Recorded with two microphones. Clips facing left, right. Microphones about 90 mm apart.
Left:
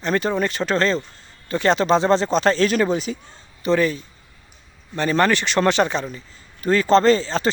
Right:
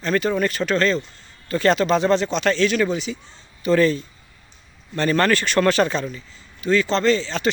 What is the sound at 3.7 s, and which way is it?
A man's voice, 10° left (ahead or behind).